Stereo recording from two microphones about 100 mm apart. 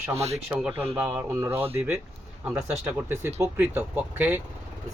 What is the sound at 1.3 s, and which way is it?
Speech, 25° right (ahead or behind).